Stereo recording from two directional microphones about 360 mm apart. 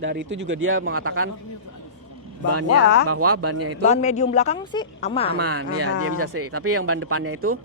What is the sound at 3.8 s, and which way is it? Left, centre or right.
A woman's voice, centre.